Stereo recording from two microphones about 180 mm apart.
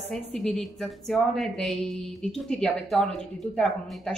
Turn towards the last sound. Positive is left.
turn(degrees=0)  # may be behind; listen again after turning